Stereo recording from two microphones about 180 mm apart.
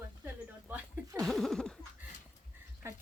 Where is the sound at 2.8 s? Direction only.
15° right (ahead or behind).